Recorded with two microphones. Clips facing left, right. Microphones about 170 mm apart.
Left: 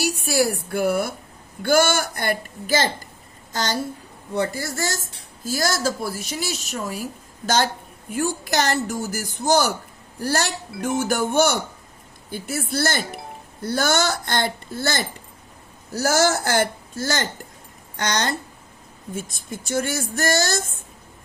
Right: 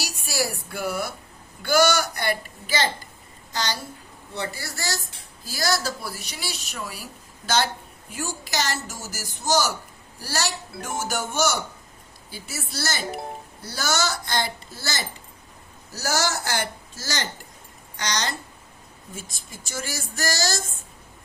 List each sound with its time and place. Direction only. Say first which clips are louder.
0.0 s a woman's voice: left 7 dB; 55° left (ahead or behind)